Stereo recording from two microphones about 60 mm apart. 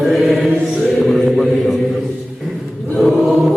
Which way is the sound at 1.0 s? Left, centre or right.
Centre.